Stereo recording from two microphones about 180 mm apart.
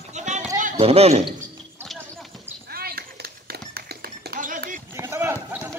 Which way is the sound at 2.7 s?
60° right (ahead or behind).